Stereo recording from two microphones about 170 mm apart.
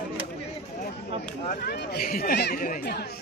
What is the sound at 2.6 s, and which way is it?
Speech, 60° left (ahead or behind).